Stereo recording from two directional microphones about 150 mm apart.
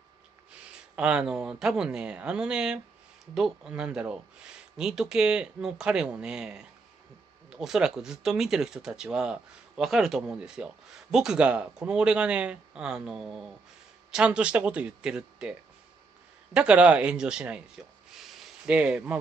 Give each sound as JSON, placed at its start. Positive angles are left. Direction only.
{"t": 0.7, "sound": "speech", "side_deg": -5}
{"t": 16.5, "sound": "speech", "side_deg": -5}